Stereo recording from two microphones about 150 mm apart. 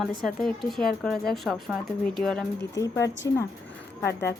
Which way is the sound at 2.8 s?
20° left (ahead or behind).